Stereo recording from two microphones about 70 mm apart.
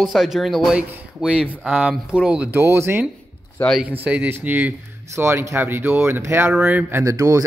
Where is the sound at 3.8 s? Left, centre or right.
Right.